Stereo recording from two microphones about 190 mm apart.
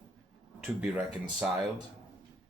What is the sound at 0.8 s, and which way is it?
Speech, 5° right (ahead or behind).